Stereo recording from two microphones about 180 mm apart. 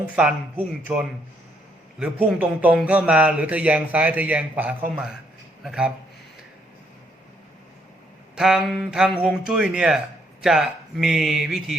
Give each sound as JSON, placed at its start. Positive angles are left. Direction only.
{"t": 0.0, "sound": "speech", "side_deg": -5}
{"t": 8.4, "sound": "speech", "side_deg": -5}